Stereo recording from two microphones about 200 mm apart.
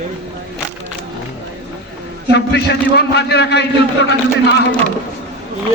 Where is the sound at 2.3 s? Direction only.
60° left (ahead or behind).